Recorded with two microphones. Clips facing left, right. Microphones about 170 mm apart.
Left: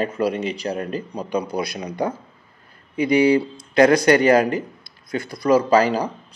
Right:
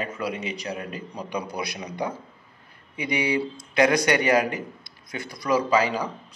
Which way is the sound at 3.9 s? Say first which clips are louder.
Left 6 dB; 35° left (ahead or behind).